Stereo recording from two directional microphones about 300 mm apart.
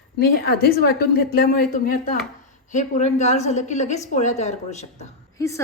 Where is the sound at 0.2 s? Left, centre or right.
Left.